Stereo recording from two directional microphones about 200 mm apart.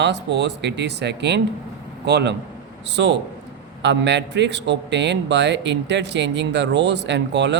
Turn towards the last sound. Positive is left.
turn(degrees=-60)  # may be behind; listen again after turning